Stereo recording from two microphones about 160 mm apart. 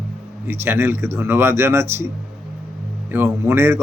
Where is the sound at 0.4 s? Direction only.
15° right (ahead or behind).